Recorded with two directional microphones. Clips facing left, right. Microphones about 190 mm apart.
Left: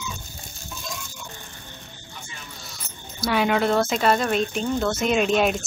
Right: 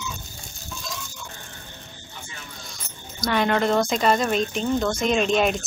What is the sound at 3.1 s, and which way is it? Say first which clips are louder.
Speech: even; 5° left (ahead or behind).